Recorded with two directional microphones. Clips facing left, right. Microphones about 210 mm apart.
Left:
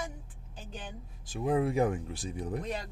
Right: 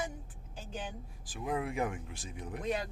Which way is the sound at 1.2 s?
30° left (ahead or behind).